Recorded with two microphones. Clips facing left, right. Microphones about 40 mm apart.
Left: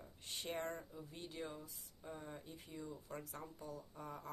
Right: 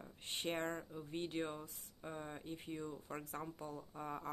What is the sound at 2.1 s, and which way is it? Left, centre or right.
Speech, right.